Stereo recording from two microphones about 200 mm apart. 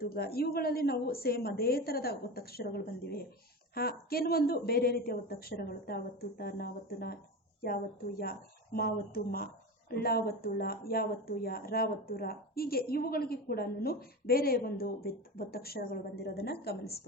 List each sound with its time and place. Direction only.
0.0 s speech: 50° left (ahead or behind)
8.2 s speech: 50° left (ahead or behind)